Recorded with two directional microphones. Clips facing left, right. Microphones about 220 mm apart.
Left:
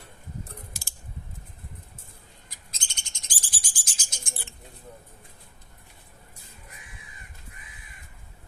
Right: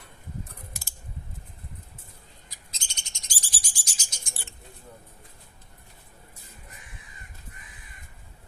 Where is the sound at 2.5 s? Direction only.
50° left (ahead or behind).